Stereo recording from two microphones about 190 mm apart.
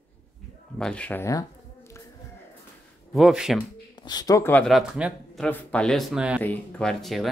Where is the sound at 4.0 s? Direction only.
20° left (ahead or behind).